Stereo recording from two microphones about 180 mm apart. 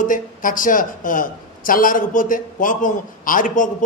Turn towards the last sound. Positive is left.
turn(degrees=45)  # may be behind; listen again after turning